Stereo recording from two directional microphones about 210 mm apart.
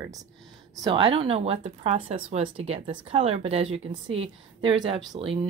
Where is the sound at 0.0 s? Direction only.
15° right (ahead or behind).